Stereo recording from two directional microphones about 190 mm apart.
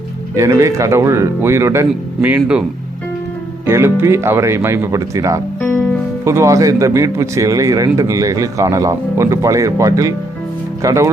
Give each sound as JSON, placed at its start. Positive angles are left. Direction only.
{"t": 0.3, "sound": "speech", "side_deg": -15}
{"t": 3.7, "sound": "speech", "side_deg": -15}
{"t": 5.5, "sound": "music", "side_deg": 10}
{"t": 6.2, "sound": "speech", "side_deg": -15}